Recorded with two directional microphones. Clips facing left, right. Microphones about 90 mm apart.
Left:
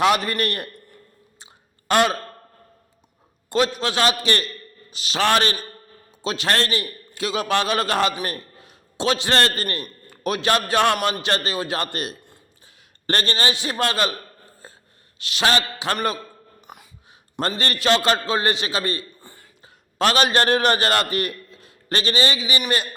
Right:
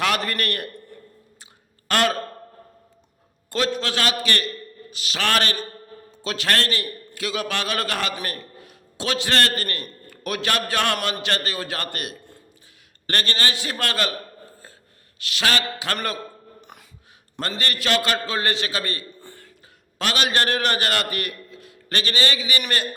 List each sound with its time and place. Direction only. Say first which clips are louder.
0.0 s a man's voice: left 4 dB; 20° left (ahead or behind)
1.9 s a man's voice: left 3 dB; 20° left (ahead or behind)
3.5 s a man's voice: left 3 dB; 20° left (ahead or behind)
15.2 s a man's voice: left 3 dB; 25° left (ahead or behind)
16.6 s music: left 1 dB; 5° left (ahead or behind)
17.6 s a man's voice: left 3 dB; 30° left (ahead or behind)
19.2 s a sound: right 3 dB; 5° left (ahead or behind)
20.0 s a man's voice: left 5 dB; 35° left (ahead or behind)